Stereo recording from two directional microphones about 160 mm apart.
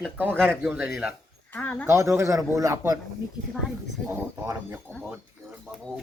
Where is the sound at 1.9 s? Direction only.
20° right (ahead or behind).